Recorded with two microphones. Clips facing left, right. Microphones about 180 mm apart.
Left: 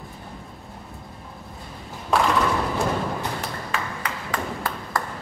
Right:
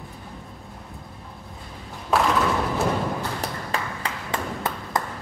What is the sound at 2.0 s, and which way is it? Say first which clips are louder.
Thump: even; centre (ahead or behind).